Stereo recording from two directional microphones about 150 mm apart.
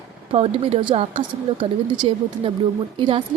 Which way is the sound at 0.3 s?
40° right (ahead or behind).